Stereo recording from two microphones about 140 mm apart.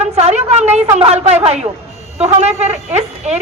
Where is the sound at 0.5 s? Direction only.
55° right (ahead or behind).